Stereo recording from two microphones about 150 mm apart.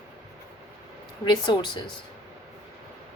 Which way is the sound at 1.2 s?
30° left (ahead or behind).